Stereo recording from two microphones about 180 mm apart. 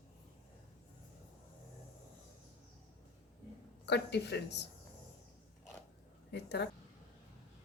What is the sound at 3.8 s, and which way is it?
Speech, 70° left (ahead or behind).